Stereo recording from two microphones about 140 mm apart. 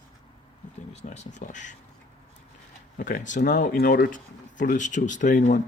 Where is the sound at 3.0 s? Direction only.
70° left (ahead or behind).